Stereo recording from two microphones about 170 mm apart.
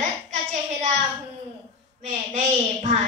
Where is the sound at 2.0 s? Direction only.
45° right (ahead or behind).